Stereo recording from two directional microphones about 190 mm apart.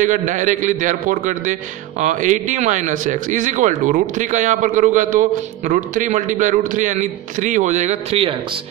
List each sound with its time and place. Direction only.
0.0 s a man's voice: 40° right (ahead or behind)